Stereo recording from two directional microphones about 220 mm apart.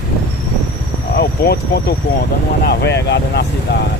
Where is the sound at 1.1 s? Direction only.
45° left (ahead or behind).